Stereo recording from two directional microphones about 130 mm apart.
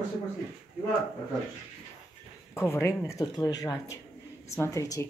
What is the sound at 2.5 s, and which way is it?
Speech, 20° left (ahead or behind).